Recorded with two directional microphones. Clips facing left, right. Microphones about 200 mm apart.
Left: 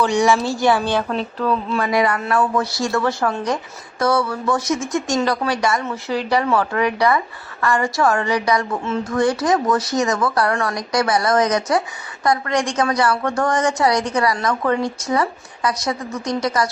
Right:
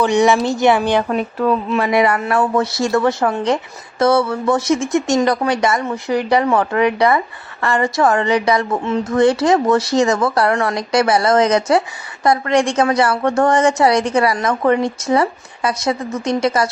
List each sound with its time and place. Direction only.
0.0 s a woman's voice: 20° right (ahead or behind)